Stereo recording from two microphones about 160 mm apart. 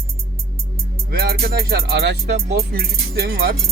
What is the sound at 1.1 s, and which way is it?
Speech, 70° right (ahead or behind).